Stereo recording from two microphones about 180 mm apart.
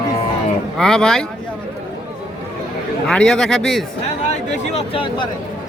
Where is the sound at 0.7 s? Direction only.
5° left (ahead or behind).